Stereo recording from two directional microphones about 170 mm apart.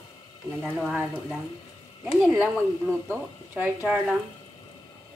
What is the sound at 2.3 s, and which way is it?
Speech, 10° right (ahead or behind).